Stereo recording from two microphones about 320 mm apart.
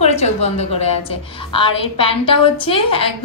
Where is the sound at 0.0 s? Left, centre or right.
Centre.